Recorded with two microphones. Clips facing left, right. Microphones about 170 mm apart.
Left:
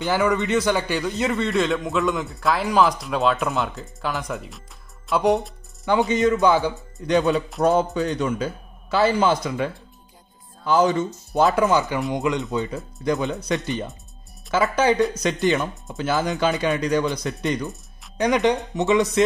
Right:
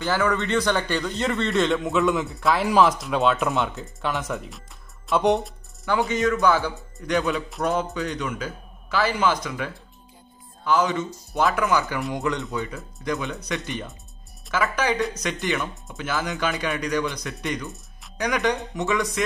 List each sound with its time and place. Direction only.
0.0 s a man's voice: 15° left (ahead or behind)
5.9 s speech: 20° left (ahead or behind)
7.9 s speech: 35° left (ahead or behind)
12.7 s speech: 35° left (ahead or behind)